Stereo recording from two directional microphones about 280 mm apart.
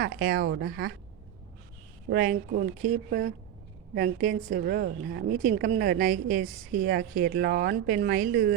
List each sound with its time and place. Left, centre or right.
0.0 s a woman's voice: right
2.0 s a woman's voice: right